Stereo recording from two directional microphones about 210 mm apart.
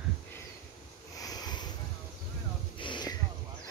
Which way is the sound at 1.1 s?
20° left (ahead or behind).